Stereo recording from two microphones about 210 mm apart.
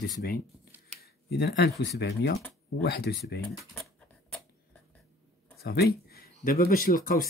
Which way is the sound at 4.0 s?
5° left (ahead or behind).